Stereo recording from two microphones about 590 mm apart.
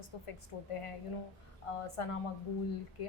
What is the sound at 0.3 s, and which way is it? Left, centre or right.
A woman's voice, left.